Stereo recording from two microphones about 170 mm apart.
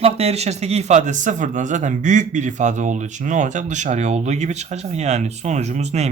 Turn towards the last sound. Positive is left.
turn(degrees=-40)  # may be behind; listen again after turning